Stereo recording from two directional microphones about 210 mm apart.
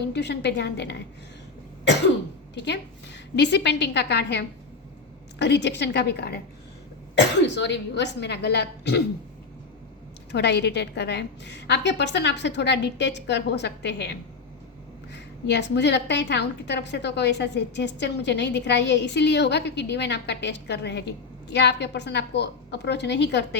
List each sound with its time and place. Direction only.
0.1 s a woman's voice: 55° left (ahead or behind)
2.6 s a woman's voice: 55° left (ahead or behind)
7.4 s a woman's voice: 55° left (ahead or behind)
10.3 s a woman's voice: 55° left (ahead or behind)